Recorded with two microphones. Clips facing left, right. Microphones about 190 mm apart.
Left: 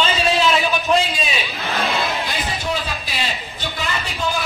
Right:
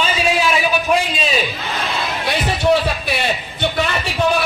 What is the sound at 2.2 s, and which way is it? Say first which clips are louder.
A man's voice: right 7 dB; 70° right (ahead or behind).